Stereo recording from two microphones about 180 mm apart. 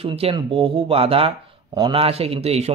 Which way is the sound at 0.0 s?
30° right (ahead or behind).